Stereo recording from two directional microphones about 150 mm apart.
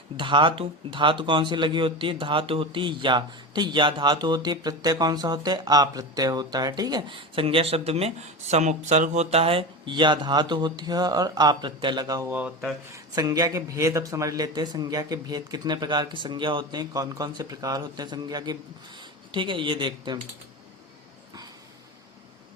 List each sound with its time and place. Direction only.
0.2 s speech: 35° right (ahead or behind)
12.3 s speech: 10° right (ahead or behind)
12.9 s speech: 25° right (ahead or behind)